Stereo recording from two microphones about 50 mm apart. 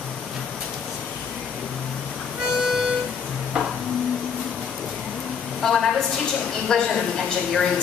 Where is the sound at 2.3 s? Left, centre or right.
Centre.